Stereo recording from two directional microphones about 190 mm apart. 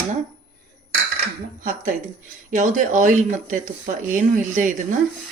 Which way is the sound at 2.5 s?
40° right (ahead or behind).